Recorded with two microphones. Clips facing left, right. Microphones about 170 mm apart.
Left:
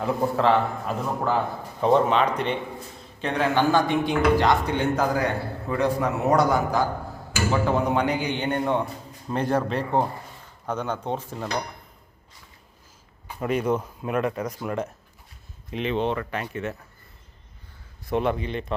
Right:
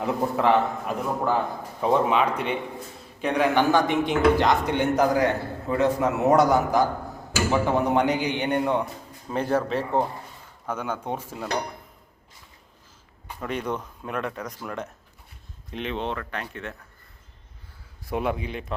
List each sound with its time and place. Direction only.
0.0 s a man's voice: 15° right (ahead or behind)
9.3 s a man's voice: 5° right (ahead or behind)
13.4 s speech: 5° left (ahead or behind)
18.1 s a man's voice: 5° right (ahead or behind)